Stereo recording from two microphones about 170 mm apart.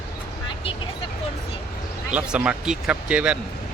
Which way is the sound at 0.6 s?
35° left (ahead or behind).